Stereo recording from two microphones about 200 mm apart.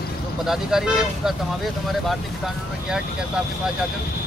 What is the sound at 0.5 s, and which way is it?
Speech, centre (ahead or behind).